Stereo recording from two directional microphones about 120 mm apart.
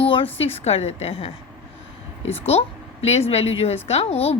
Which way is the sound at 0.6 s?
60° left (ahead or behind).